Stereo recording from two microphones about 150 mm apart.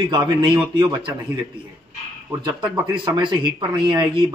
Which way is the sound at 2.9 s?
30° right (ahead or behind).